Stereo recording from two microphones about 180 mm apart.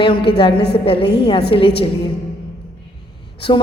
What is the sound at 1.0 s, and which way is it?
Speech, 65° left (ahead or behind).